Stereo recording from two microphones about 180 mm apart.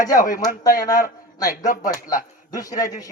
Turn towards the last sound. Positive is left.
turn(degrees=20)  # may be behind; listen again after turning